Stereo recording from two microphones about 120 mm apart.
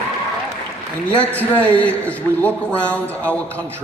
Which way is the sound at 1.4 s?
10° left (ahead or behind).